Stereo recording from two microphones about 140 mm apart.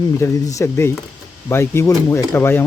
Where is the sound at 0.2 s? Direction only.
20° left (ahead or behind).